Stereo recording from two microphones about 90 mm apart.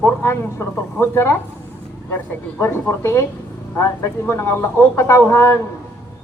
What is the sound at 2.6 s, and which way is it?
Speech, 30° left (ahead or behind).